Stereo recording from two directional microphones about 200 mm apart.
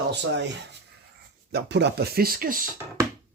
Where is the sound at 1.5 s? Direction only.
60° right (ahead or behind).